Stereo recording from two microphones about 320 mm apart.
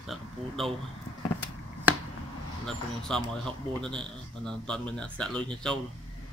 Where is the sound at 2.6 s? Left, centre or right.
Centre.